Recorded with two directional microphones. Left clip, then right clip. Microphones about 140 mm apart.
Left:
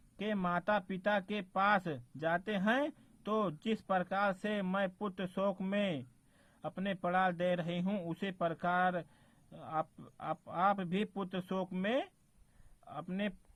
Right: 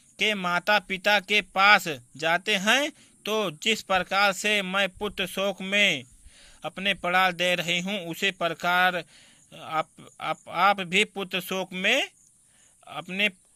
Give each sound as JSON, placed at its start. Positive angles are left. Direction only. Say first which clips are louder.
{"t": 0.2, "sound": "speech", "louder": "right 11 dB", "side_deg": -20}